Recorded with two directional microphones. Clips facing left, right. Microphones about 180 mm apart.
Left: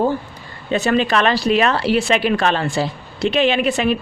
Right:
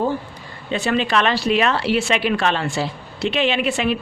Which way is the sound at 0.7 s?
45° left (ahead or behind).